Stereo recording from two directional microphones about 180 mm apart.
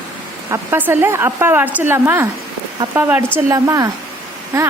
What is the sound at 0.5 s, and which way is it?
A woman's voice, 10° right (ahead or behind).